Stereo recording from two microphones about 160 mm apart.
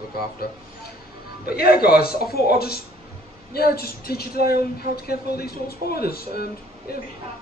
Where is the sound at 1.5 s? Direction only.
70° left (ahead or behind).